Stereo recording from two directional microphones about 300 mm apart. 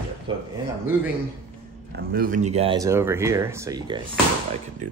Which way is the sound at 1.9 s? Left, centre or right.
Right.